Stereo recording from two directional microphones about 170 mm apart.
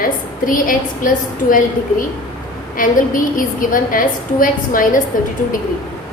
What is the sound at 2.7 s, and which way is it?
A woman's voice, 55° left (ahead or behind).